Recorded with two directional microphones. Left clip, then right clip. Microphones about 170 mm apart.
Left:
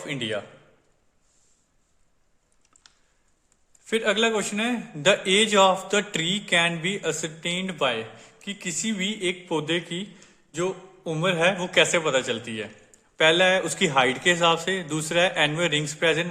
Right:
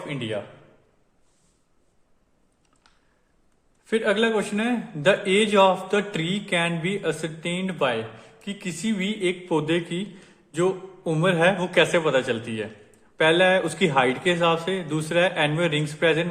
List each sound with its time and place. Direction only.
0.1 s a man's voice: 35° left (ahead or behind)
2.8 s typing: 30° left (ahead or behind)
3.8 s a man's voice: 20° left (ahead or behind)